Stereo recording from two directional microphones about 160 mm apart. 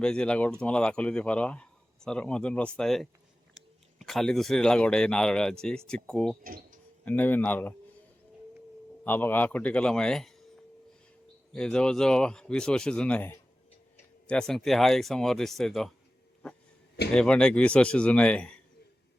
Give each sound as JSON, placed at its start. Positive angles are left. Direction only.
{"t": 0.0, "sound": "speech", "side_deg": 5}
{"t": 6.4, "sound": "speech", "side_deg": -65}
{"t": 7.0, "sound": "speech", "side_deg": 10}
{"t": 9.0, "sound": "speech", "side_deg": 10}
{"t": 11.5, "sound": "speech", "side_deg": 5}
{"t": 17.1, "sound": "speech", "side_deg": 5}